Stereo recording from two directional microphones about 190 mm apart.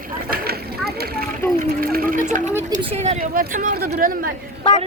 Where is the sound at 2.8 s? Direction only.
30° right (ahead or behind); by 4.3 s 50° right (ahead or behind).